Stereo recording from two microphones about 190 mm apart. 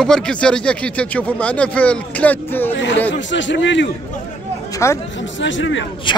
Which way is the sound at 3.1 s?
75° left (ahead or behind).